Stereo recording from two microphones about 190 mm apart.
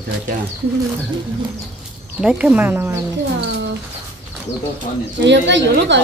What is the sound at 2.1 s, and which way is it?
Speech, 5° right (ahead or behind).